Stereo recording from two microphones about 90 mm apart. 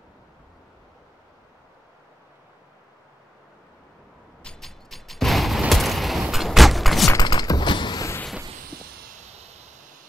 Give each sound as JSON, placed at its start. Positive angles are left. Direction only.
{"t": 4.4, "sound": "fusillade", "side_deg": 5}
{"t": 6.3, "sound": "vehicle", "side_deg": 0}
{"t": 7.2, "sound": "mechanisms", "side_deg": 50}